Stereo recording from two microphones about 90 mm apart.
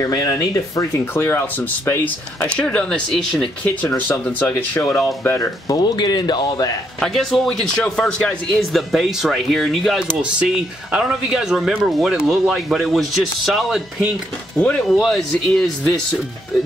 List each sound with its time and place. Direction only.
0.0 s speech: 40° left (ahead or behind); by 2.1 s 20° left (ahead or behind)
2.4 s a man's voice: 10° left (ahead or behind)
3.9 s speech: 20° left (ahead or behind)
5.7 s speech: 45° left (ahead or behind)
7.0 s a man's voice: 5° left (ahead or behind)
8.5 s speech: centre (ahead or behind)
10.2 s speech: 10° right (ahead or behind)
14.6 s a man's voice: 15° left (ahead or behind)
14.9 s speech: centre (ahead or behind)